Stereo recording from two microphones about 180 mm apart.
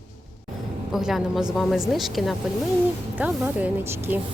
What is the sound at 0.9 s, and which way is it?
A woman's voice, centre (ahead or behind).